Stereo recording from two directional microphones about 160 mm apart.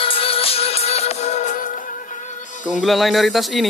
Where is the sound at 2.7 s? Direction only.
Centre (ahead or behind).